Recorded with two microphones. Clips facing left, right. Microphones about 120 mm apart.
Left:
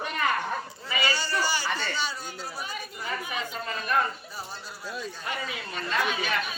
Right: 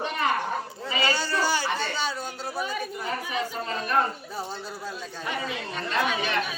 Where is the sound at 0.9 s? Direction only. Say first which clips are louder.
Right 3 dB; 25° right (ahead or behind).